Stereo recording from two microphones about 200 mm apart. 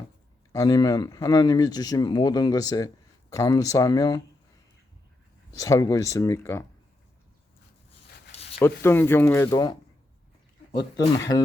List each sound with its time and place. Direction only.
0.5 s speech: 15° left (ahead or behind)
5.5 s speech: 15° left (ahead or behind)
8.4 s a sound: 30° left (ahead or behind)
8.8 s speech: 10° left (ahead or behind)
10.9 s speech: 20° left (ahead or behind)